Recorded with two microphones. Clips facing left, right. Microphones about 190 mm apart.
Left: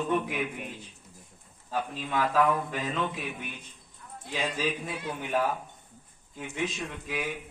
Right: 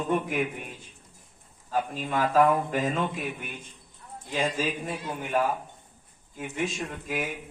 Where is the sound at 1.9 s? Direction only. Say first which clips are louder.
Right 3 dB; 45° right (ahead or behind).